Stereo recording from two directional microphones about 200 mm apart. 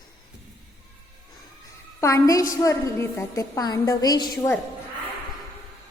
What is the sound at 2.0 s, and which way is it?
A woman's voice, 15° left (ahead or behind).